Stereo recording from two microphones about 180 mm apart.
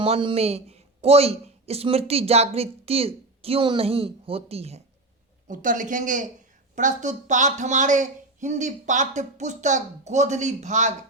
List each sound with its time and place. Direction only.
0.0 s a woman's voice: 30° right (ahead or behind)
5.5 s speech: 45° right (ahead or behind)